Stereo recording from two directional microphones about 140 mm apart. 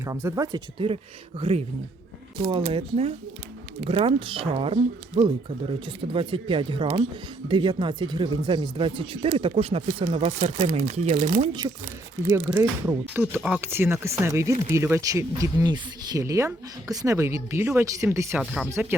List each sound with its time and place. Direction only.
0.0 s speech: 20° right (ahead or behind)
0.8 s speech: 35° right (ahead or behind)
1.4 s speech: 45° right (ahead or behind)
11.6 s speech: 25° right (ahead or behind)
12.5 s speech: 15° right (ahead or behind)